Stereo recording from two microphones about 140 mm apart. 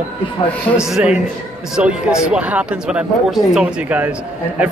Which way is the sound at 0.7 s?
5° right (ahead or behind).